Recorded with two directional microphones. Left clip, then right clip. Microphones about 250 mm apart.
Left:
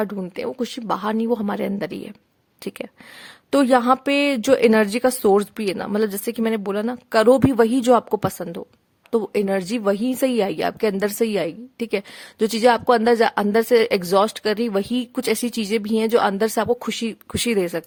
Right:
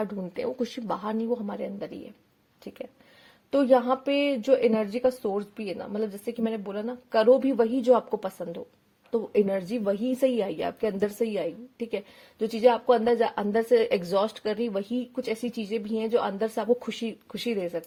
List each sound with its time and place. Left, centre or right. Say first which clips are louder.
0.0 s a woman's voice: left 5 dB; centre
3.5 s a woman's voice: left 5 dB; left